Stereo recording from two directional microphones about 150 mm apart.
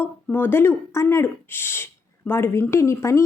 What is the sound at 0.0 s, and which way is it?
A woman's voice, 15° left (ahead or behind).